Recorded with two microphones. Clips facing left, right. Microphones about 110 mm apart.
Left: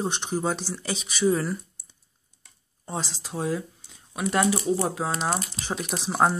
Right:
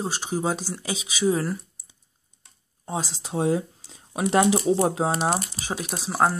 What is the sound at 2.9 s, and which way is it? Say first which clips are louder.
Speech: right 3 dB; 15° right (ahead or behind).